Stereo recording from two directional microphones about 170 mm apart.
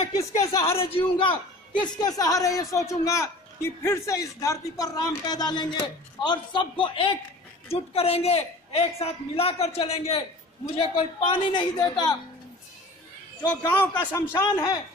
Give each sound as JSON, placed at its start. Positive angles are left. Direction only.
{"t": 0.2, "sound": "a man's voice", "side_deg": 20}
{"t": 0.7, "sound": "a man's voice", "side_deg": 35}
{"t": 13.6, "sound": "a man's voice", "side_deg": 15}